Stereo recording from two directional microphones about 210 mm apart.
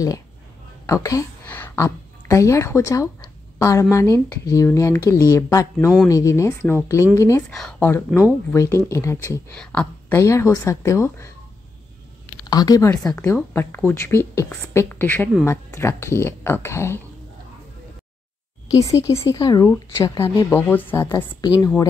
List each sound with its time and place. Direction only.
0.8 s a woman's voice: 15° left (ahead or behind)
12.4 s speech: 20° left (ahead or behind)
18.9 s speech: 15° left (ahead or behind)